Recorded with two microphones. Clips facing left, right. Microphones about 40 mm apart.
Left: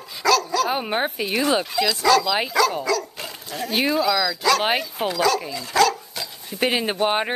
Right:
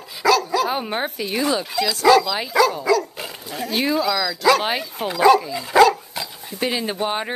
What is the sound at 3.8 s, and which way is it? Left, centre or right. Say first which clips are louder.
Speech: even; centre.